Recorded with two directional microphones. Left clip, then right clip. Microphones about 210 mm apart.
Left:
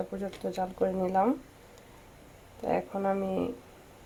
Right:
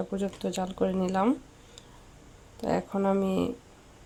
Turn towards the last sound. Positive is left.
turn(degrees=-15)  # may be behind; listen again after turning